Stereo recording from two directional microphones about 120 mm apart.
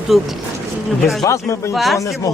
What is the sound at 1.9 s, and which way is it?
Speech, 25° left (ahead or behind).